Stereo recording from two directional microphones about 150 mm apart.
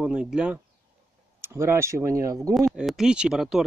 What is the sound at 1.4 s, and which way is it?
Speech, 15° right (ahead or behind).